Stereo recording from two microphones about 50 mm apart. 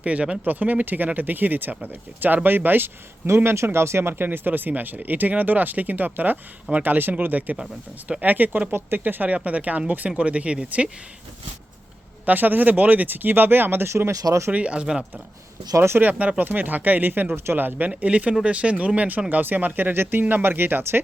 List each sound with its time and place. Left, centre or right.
0.0 s speech: right
3.2 s speech: right
4.1 s speech: right
8.7 s speech: right
9.3 s speech: right
12.2 s speech: right
14.5 s speech: right
15.7 s speech: right
16.0 s speech: right